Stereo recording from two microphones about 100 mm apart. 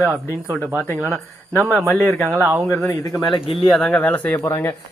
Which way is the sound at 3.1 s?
Centre (ahead or behind).